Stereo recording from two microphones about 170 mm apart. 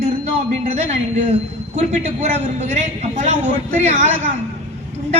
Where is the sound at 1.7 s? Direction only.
40° right (ahead or behind).